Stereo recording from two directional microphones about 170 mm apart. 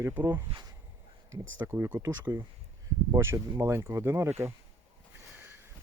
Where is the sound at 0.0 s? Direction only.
10° right (ahead or behind).